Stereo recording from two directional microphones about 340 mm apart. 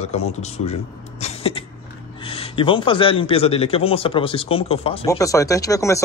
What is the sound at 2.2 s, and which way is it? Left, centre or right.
Speech, centre.